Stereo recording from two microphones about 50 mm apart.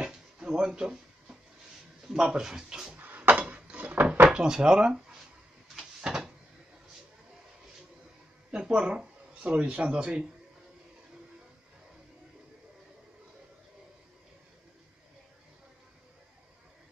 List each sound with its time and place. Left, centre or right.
0.0 s drawer open or close: centre
2.1 s speech: centre
3.0 s a sound: right
4.3 s speech: centre
5.8 s door: centre
8.5 s speech: centre